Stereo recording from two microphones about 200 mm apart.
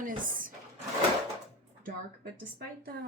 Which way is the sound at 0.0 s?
45° right (ahead or behind).